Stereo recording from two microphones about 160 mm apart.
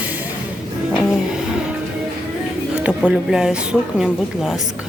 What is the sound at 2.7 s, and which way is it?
A woman's voice, 5° right (ahead or behind).